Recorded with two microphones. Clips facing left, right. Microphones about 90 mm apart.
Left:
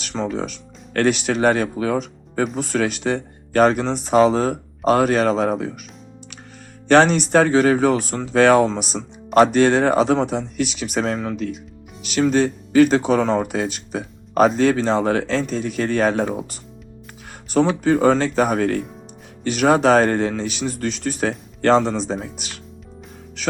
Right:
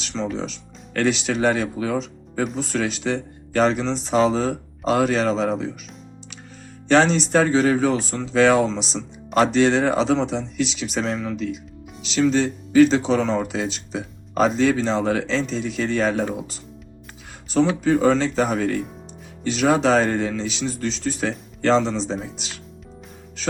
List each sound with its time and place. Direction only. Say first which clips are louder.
0.0 s music: left 2 dB; 50° left (ahead or behind)
0.3 s speech: left 3 dB; 55° left (ahead or behind)
6.8 s speech: left 3 dB; 55° left (ahead or behind)
17.8 s speech: left 2 dB; 50° left (ahead or behind)